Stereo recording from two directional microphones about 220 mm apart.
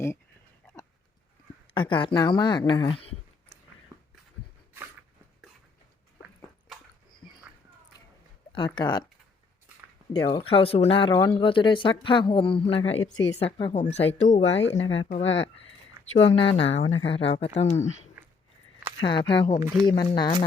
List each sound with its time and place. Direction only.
1.7 s speech: 20° left (ahead or behind)
8.5 s speech: 20° left (ahead or behind)
10.1 s speech: 25° left (ahead or behind)
14.5 s speech: 55° left (ahead or behind)
16.2 s speech: 25° left (ahead or behind)
18.9 s speech: 20° left (ahead or behind)